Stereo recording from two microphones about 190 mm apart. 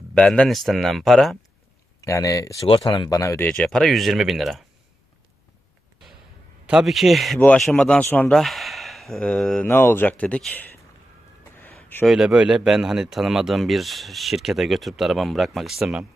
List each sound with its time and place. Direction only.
0.1 s speech: 5° left (ahead or behind)
2.0 s speech: 15° left (ahead or behind); by 4.6 s centre (ahead or behind)
6.7 s speech: centre (ahead or behind)
11.5 s a sound: 10° left (ahead or behind)
12.0 s speech: 5° right (ahead or behind)